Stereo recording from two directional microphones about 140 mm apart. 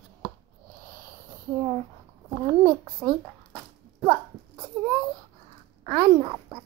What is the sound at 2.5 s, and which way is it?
Speech, 25° right (ahead or behind).